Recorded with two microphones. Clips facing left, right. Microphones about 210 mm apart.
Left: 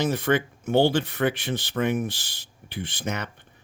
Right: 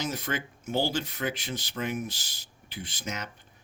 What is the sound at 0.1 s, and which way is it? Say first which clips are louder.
Speech: left 10 dB; 60° left (ahead or behind).